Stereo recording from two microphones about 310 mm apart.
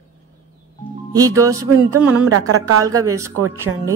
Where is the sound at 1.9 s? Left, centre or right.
Right.